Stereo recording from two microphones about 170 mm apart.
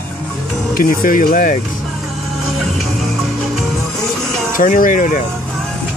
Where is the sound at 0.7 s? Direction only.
55° left (ahead or behind).